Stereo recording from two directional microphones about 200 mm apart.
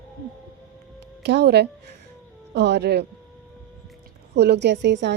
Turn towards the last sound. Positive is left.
turn(degrees=-60)  # may be behind; listen again after turning